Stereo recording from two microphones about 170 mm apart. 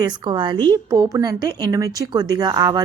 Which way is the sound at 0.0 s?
25° right (ahead or behind).